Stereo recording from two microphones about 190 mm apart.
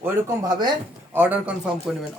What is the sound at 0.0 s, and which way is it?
Speech, 15° right (ahead or behind).